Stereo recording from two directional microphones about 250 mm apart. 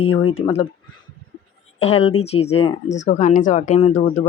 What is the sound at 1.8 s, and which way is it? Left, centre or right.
Speech, left.